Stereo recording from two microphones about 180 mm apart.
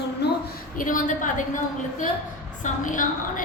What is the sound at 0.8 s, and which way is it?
Speech, 45° left (ahead or behind).